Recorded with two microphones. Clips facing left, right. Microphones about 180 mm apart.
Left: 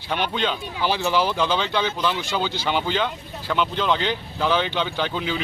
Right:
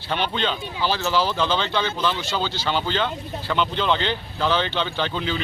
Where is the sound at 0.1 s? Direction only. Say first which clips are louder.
Even; 10° left (ahead or behind).